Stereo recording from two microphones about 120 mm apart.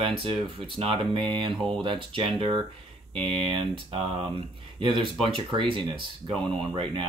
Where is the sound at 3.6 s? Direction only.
50° right (ahead or behind).